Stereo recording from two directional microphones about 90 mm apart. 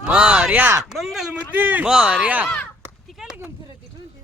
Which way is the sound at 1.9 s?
5° right (ahead or behind).